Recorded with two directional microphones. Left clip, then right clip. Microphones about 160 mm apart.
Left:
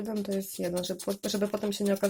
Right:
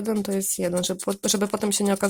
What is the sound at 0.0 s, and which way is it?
Speech, 55° right (ahead or behind).